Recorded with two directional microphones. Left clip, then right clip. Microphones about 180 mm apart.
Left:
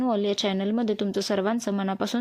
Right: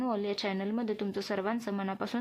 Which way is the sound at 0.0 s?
35° left (ahead or behind).